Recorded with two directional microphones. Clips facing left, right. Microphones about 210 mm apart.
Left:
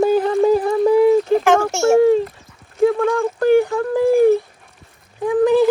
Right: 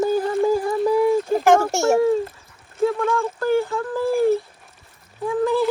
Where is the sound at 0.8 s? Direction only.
60° left (ahead or behind).